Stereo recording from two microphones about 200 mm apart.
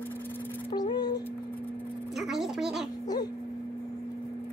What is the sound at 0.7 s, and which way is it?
Music, 20° left (ahead or behind).